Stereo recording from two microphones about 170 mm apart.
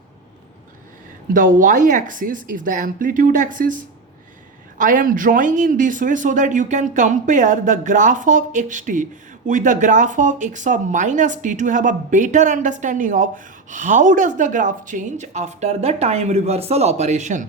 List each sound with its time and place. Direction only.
1.3 s speech: 50° right (ahead or behind)